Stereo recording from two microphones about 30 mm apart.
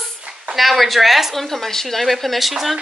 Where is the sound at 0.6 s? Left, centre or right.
Centre.